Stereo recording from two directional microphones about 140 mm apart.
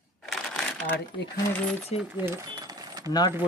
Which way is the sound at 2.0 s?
15° right (ahead or behind).